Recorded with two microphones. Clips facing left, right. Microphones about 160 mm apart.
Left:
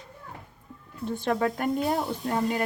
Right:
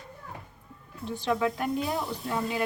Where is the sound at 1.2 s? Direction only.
45° left (ahead or behind).